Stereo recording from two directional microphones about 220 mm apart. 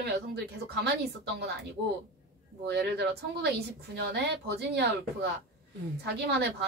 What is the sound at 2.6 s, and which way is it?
A woman's voice, 50° right (ahead or behind).